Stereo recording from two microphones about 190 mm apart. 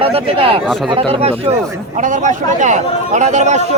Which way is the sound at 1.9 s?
40° right (ahead or behind).